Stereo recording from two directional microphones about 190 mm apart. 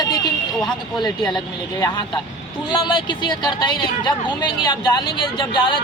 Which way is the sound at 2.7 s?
25° left (ahead or behind).